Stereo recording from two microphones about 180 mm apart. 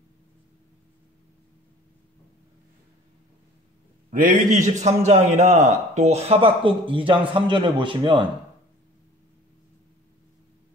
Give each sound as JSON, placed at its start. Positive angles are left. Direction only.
{"t": 4.1, "sound": "a man's voice", "side_deg": -50}